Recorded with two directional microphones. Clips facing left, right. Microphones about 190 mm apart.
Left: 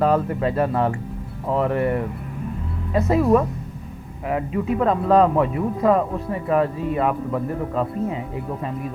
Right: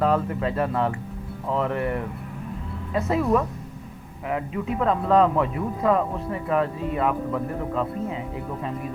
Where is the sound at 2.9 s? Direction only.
40° left (ahead or behind).